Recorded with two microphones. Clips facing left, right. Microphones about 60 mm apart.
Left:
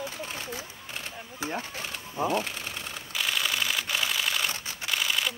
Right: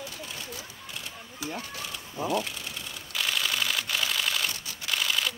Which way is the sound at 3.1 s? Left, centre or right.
Centre.